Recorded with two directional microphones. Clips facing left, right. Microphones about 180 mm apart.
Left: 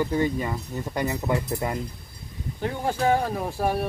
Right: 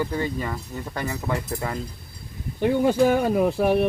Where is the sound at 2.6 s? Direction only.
80° right.